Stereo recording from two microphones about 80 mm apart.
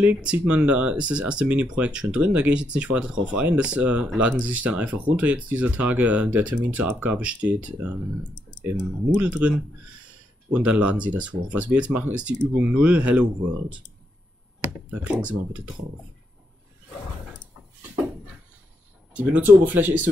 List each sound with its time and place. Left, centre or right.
0.0 s speech: centre
14.6 s speech: centre
19.1 s speech: right